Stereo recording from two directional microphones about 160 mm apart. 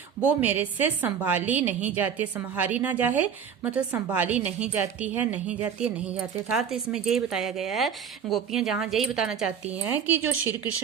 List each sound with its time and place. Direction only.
0.3 s a woman's voice: 10° right (ahead or behind)